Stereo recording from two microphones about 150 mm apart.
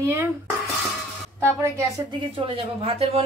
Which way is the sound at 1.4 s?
15° right (ahead or behind).